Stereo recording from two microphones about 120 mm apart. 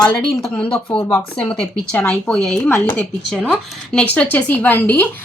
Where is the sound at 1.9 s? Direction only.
10° left (ahead or behind).